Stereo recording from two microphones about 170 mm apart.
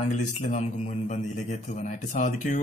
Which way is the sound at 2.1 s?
45° left (ahead or behind).